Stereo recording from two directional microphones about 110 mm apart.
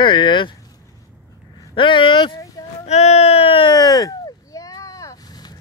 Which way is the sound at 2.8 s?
75° left (ahead or behind).